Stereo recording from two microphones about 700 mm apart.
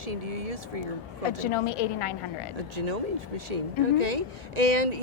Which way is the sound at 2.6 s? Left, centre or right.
Right.